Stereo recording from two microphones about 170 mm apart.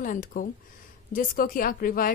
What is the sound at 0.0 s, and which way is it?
A woman's voice, 50° left (ahead or behind).